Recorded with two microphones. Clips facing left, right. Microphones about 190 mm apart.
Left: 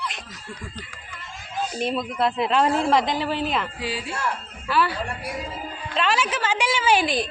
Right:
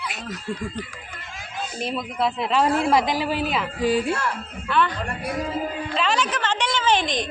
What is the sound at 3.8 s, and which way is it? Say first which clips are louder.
Speech: right 9 dB; 50° right (ahead or behind).